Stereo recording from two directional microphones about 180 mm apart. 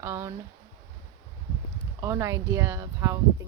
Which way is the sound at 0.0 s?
15° right (ahead or behind).